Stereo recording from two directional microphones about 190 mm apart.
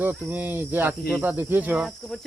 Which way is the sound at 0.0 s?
10° right (ahead or behind).